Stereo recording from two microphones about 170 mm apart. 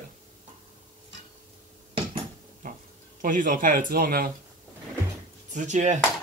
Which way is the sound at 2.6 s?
50° right (ahead or behind).